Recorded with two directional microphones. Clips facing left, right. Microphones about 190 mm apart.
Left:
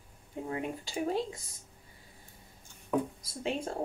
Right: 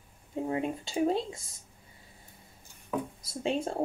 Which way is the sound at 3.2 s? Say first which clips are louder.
Right 3 dB; 25° right (ahead or behind).